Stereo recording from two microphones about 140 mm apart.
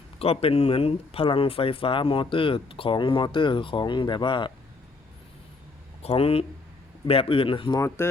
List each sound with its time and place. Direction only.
0.2 s speech: 45° left (ahead or behind)
6.0 s speech: 45° left (ahead or behind)
7.8 s speech: 20° left (ahead or behind)